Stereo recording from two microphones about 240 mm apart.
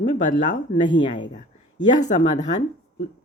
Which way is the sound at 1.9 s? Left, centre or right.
Left.